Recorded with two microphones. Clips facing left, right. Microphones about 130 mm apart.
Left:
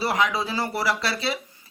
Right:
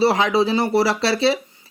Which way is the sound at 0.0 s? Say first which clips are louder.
Right 7 dB; 30° right (ahead or behind).